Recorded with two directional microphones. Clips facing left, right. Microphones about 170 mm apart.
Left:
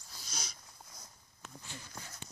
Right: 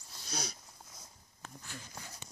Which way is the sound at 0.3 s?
65° right (ahead or behind).